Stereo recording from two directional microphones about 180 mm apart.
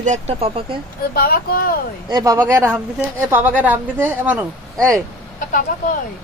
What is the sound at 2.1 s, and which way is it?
Speech, 20° right (ahead or behind).